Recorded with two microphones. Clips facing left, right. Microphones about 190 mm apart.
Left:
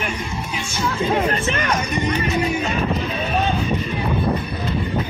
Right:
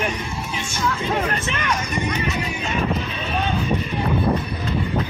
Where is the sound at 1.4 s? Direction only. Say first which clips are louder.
Left 3 dB; 45° left (ahead or behind).